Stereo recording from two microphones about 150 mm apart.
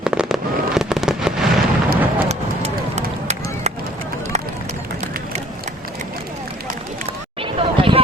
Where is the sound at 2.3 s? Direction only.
45° right (ahead or behind).